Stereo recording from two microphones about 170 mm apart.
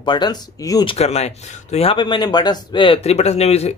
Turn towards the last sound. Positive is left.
turn(degrees=40)  # may be behind; listen again after turning